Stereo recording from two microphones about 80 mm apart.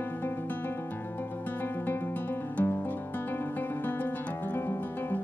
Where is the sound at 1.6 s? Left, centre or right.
Left.